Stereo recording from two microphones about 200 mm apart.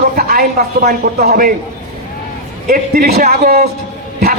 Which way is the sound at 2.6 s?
50° right (ahead or behind).